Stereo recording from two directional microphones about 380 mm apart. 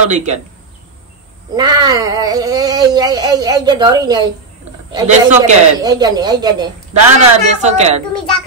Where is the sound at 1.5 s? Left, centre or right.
Centre.